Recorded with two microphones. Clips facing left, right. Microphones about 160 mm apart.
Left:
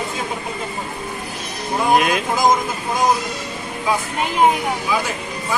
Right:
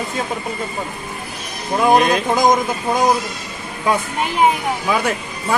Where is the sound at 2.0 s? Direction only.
Centre (ahead or behind).